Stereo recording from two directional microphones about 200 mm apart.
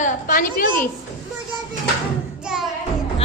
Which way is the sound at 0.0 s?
40° left (ahead or behind).